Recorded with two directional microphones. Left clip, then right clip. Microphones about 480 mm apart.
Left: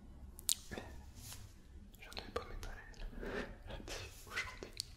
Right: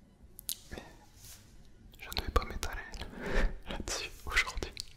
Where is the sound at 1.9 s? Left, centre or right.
Right.